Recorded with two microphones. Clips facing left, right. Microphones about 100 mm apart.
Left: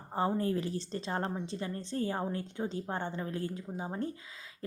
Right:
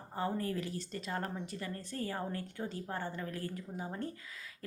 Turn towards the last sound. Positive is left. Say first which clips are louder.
# left 4 dB
turn(degrees=25)  # may be behind; listen again after turning